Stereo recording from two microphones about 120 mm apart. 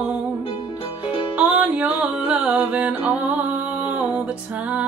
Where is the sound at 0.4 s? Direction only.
45° left (ahead or behind).